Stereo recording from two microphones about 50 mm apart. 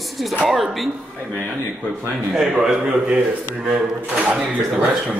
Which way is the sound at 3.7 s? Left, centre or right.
Right.